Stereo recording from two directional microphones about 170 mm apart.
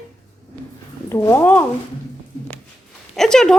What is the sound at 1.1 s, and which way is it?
Speech, 15° left (ahead or behind).